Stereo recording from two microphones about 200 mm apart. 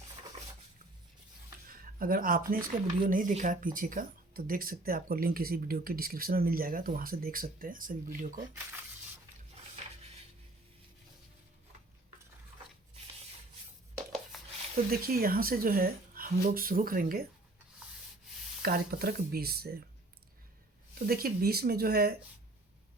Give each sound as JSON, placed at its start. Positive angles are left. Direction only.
{"t": 1.6, "sound": "speech", "side_deg": -45}
{"t": 8.4, "sound": "speech", "side_deg": -10}
{"t": 14.3, "sound": "a sound", "side_deg": 0}
{"t": 14.8, "sound": "speech", "side_deg": -45}
{"t": 18.6, "sound": "speech", "side_deg": -50}
{"t": 21.1, "sound": "speech", "side_deg": -50}